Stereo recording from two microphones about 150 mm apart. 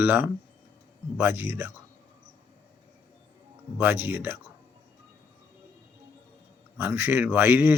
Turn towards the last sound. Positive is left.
turn(degrees=-15)  # may be behind; listen again after turning